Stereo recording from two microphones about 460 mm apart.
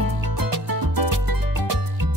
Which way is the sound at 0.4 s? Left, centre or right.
Right.